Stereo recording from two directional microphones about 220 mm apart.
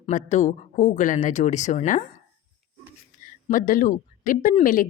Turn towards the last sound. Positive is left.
turn(degrees=40)  # may be behind; listen again after turning